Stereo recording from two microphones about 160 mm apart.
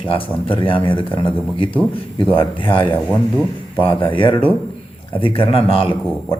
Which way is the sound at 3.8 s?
30° left (ahead or behind).